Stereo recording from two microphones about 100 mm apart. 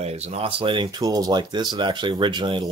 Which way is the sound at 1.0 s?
40° right (ahead or behind).